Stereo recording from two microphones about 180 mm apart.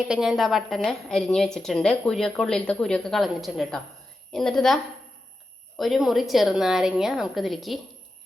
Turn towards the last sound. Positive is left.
turn(degrees=0)  # may be behind; listen again after turning